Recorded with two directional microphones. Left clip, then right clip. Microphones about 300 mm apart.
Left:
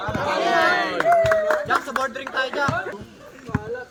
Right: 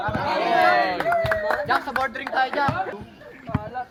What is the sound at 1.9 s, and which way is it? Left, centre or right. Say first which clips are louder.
Music: even; centre.